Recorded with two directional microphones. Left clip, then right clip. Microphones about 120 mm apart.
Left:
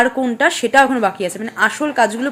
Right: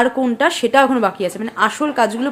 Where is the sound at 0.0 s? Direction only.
20° right (ahead or behind).